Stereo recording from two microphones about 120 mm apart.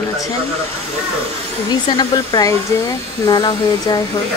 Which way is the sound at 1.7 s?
35° left (ahead or behind).